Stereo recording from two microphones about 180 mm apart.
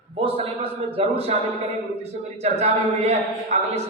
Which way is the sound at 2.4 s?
35° right (ahead or behind).